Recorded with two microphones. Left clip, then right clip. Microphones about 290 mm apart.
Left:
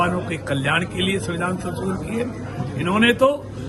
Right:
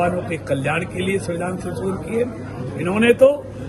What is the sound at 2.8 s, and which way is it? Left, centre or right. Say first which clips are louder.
Speech: right 3 dB; centre.